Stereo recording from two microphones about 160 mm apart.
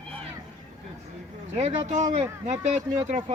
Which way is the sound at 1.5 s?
40° right (ahead or behind).